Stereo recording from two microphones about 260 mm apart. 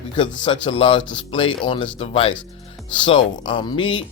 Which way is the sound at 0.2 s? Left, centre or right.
Centre.